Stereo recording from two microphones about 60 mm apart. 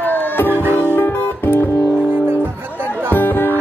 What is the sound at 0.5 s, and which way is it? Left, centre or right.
Music, right.